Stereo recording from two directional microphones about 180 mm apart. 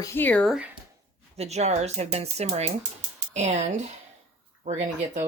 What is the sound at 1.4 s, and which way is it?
Speech, 35° right (ahead or behind).